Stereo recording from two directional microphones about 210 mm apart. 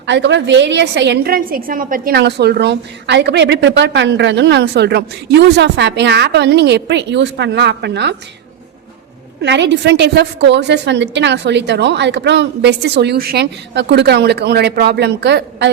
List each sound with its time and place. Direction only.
0.0 s a woman's voice: 55° right (ahead or behind)
9.4 s a woman's voice: 55° right (ahead or behind)